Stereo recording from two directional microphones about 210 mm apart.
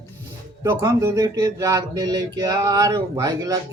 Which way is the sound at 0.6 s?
15° right (ahead or behind).